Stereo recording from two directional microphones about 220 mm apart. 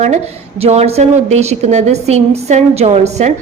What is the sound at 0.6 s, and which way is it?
A woman's voice, 30° right (ahead or behind).